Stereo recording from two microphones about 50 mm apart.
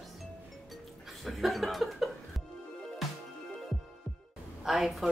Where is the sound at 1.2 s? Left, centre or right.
Centre.